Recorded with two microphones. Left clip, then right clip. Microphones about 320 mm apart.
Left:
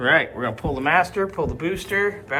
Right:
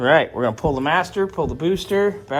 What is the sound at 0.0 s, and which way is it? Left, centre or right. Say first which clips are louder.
Speech: right 3 dB; centre.